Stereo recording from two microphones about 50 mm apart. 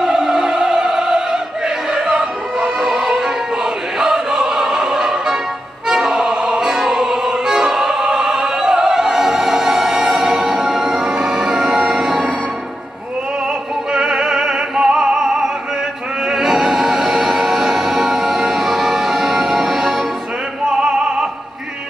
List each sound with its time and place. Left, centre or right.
0.0 s opera: centre
2.6 s music: centre
13.9 s music: centre
20.8 s opera: centre